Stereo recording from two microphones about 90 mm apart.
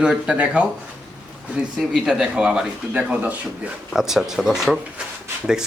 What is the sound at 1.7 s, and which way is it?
A man's voice, centre (ahead or behind).